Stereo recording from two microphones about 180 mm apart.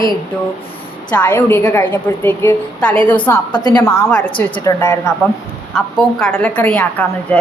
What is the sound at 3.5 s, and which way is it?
Speech, 25° left (ahead or behind).